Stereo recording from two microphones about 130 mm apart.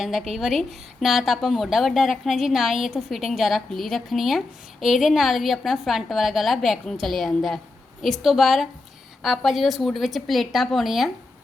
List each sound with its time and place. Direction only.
0.0 s a woman's voice: centre (ahead or behind)